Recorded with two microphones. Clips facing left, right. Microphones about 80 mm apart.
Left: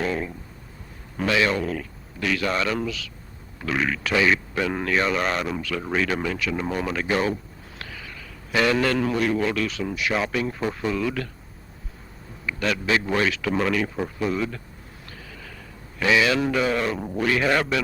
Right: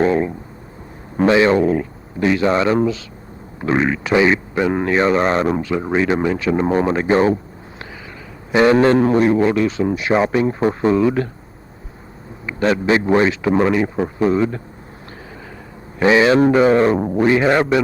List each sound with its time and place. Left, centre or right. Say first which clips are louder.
0.0 s a sound: right 10 dB; right
1.1 s speech: right 9 dB; right
8.5 s speech: right 9 dB; right
12.5 s speech: right 8 dB; right
16.0 s a man's voice: right 8 dB; right